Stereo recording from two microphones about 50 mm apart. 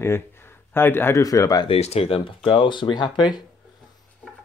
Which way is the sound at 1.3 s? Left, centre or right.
Left.